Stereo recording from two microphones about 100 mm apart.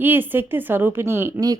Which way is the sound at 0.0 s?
20° right (ahead or behind).